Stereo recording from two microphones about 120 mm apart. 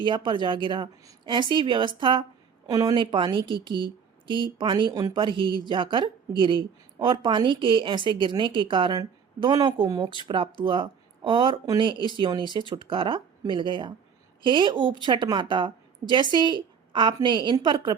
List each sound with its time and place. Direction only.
0.0 s a woman's voice: 45° right (ahead or behind)
2.6 s a woman's voice: 35° right (ahead or behind)
5.1 s a woman's voice: 45° right (ahead or behind)